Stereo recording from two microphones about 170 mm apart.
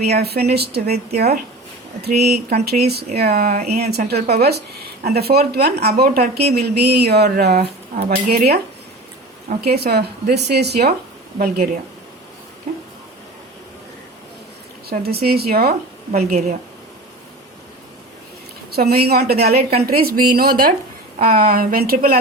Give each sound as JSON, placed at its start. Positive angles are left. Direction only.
{"t": 0.0, "sound": "a woman's voice", "side_deg": -70}
{"t": 9.6, "sound": "speech", "side_deg": -70}
{"t": 11.3, "sound": "a woman's voice", "side_deg": -60}
{"t": 14.8, "sound": "a woman's voice", "side_deg": -65}
{"t": 18.7, "sound": "a woman's voice", "side_deg": -65}